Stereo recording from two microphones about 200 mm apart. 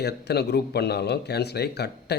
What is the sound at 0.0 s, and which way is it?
Speech, 55° left (ahead or behind).